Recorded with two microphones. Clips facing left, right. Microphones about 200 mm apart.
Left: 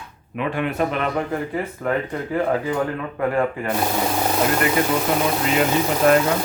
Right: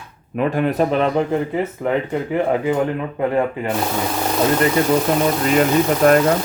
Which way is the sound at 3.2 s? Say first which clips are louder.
Right 2 dB; 20° right (ahead or behind).